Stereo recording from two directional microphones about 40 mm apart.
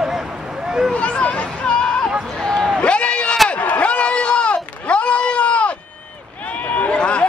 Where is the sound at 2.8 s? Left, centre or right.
Left.